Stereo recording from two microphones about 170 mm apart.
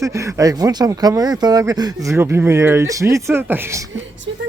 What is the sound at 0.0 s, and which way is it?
Speech, 20° right (ahead or behind).